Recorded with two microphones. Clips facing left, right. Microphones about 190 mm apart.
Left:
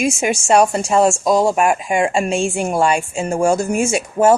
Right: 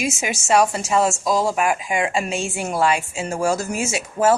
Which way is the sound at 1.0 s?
25° left (ahead or behind).